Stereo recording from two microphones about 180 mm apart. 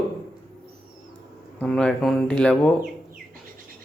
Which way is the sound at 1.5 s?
5° left (ahead or behind).